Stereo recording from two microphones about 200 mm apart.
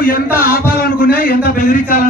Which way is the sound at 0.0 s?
45° left (ahead or behind).